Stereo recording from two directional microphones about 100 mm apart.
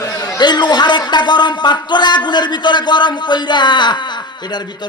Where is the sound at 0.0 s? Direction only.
35° left (ahead or behind).